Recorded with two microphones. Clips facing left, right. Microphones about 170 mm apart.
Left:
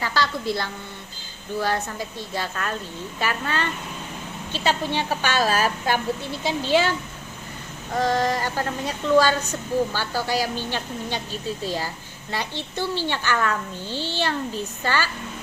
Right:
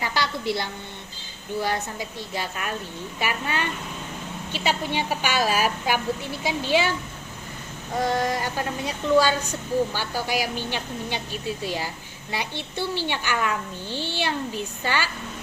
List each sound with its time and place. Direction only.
0.0 s a sound: 15° right (ahead or behind)
1.6 s a woman's voice: 15° right (ahead or behind)
7.9 s a woman's voice: 10° right (ahead or behind)